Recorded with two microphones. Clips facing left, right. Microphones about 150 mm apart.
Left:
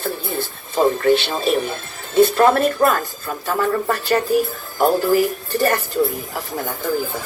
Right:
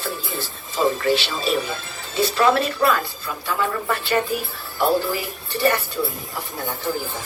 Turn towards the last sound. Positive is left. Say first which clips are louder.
# left 3 dB
turn(degrees=45)  # may be behind; listen again after turning